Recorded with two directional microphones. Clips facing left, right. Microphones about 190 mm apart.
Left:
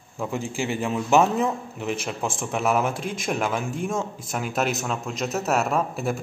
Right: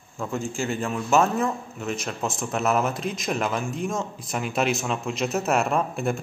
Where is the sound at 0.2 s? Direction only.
15° left (ahead or behind).